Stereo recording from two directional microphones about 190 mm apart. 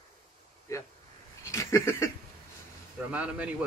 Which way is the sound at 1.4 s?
15° left (ahead or behind).